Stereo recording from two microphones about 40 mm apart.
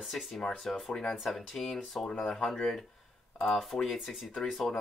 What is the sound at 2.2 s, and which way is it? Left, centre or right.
Speech, centre.